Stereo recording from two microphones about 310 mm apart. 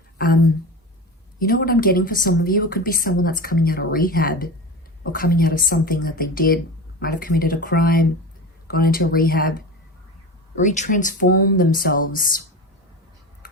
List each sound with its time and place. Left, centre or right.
1.4 s a woman's voice: left